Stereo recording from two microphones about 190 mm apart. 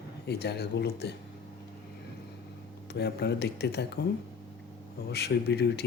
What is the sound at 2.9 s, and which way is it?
Speech, 60° left (ahead or behind).